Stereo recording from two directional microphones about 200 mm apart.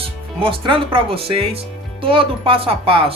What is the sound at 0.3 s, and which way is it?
Speech, 25° right (ahead or behind).